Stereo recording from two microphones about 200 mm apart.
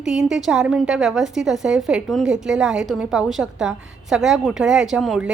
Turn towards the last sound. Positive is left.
turn(degrees=-5)  # may be behind; listen again after turning